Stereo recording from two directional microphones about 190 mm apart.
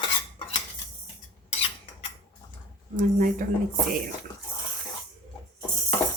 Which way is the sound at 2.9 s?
45° right (ahead or behind).